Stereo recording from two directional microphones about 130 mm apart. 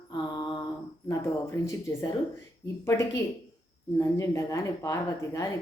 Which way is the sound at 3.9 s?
25° left (ahead or behind).